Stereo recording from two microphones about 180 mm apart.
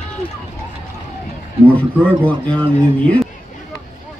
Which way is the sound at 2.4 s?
30° right (ahead or behind).